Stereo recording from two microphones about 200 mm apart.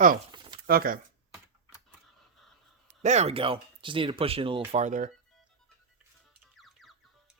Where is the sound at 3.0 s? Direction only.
35° right (ahead or behind).